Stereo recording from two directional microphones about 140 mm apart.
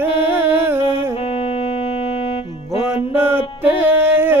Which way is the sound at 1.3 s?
40° left (ahead or behind).